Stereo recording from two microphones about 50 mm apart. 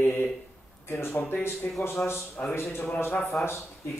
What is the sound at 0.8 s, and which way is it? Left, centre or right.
Speech, left.